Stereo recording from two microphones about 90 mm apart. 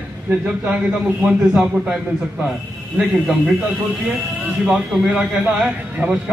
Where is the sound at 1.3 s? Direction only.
5° right (ahead or behind).